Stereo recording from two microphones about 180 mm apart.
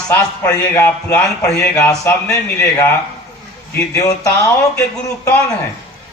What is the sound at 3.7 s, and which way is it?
A man's voice, 15° left (ahead or behind).